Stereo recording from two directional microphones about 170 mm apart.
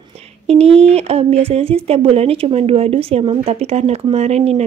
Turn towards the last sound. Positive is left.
turn(degrees=-40)  # may be behind; listen again after turning